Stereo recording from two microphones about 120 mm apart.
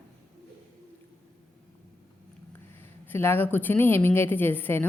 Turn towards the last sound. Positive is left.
turn(degrees=15)  # may be behind; listen again after turning